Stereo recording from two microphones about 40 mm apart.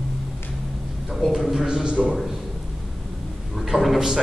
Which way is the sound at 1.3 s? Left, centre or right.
Centre.